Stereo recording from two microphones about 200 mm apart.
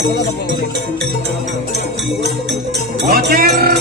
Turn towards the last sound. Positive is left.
turn(degrees=-50)  # may be behind; listen again after turning